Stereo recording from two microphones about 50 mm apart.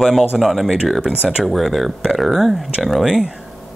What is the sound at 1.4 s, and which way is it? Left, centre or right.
Speech, centre.